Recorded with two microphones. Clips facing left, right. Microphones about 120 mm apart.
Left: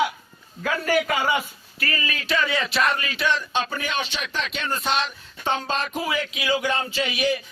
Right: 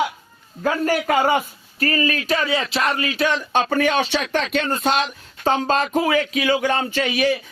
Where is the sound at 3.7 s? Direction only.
60° right (ahead or behind).